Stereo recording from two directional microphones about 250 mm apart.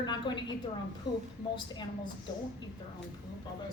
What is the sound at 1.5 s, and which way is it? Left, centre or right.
Speech, centre.